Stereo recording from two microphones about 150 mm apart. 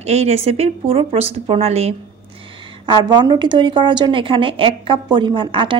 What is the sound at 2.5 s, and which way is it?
A woman's voice, 30° right (ahead or behind).